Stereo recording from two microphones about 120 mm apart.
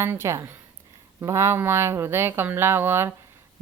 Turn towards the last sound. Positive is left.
turn(degrees=-20)  # may be behind; listen again after turning